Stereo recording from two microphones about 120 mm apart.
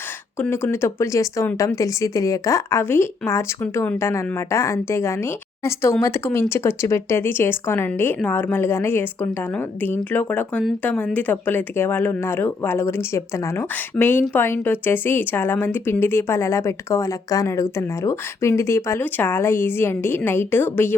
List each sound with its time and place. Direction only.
0.3 s speech: 15° left (ahead or behind)